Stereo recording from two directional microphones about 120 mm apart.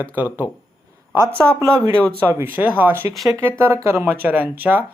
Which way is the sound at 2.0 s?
10° left (ahead or behind).